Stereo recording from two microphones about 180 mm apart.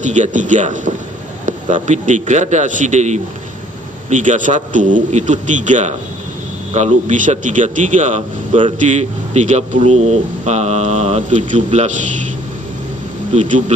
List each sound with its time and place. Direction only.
0.0 s a man's voice: 40° right (ahead or behind)
13.3 s a man's voice: 40° right (ahead or behind)